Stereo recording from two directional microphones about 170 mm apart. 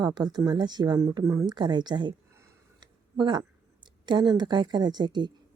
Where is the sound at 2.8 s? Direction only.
25° right (ahead or behind).